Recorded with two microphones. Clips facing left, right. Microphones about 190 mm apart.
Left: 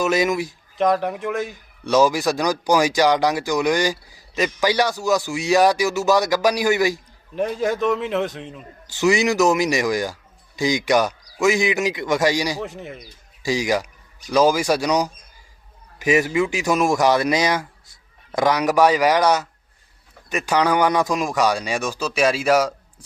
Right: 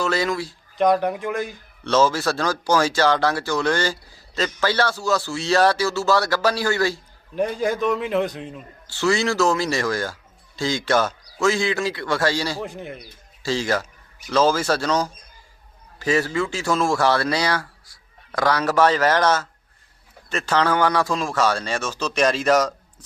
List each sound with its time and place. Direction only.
0.0 s a man's voice: 15° left (ahead or behind)
0.8 s a man's voice: centre (ahead or behind)
1.8 s a man's voice: 15° left (ahead or behind)
7.3 s a man's voice: centre (ahead or behind)
8.9 s a man's voice: 15° left (ahead or behind)
12.6 s a man's voice: centre (ahead or behind)
13.4 s a man's voice: 15° left (ahead or behind)